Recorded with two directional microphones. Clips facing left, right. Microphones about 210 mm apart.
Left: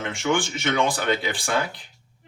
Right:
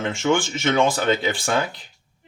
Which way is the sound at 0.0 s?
25° right (ahead or behind).